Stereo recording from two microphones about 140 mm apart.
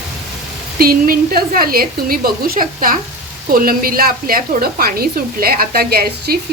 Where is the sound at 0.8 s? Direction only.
90° right.